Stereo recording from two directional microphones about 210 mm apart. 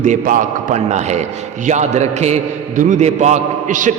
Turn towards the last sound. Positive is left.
turn(degrees=-35)  # may be behind; listen again after turning